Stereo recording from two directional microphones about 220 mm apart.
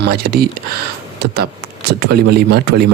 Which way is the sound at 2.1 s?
45° right (ahead or behind).